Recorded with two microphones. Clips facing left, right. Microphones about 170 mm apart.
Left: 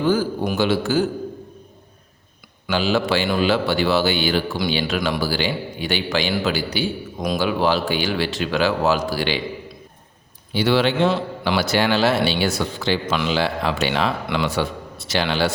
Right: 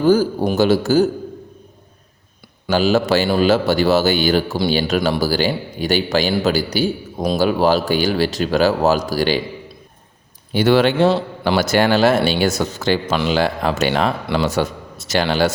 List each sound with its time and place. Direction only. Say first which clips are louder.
0.0 s a man's voice: right 5 dB; 40° right (ahead or behind)
2.6 s a man's voice: right 4 dB; 40° right (ahead or behind)
10.5 s a man's voice: right 4 dB; 50° right (ahead or behind)
11.0 s a man's voice: right 4 dB; 30° right (ahead or behind)
11.5 s a man's voice: right 4 dB; 45° right (ahead or behind)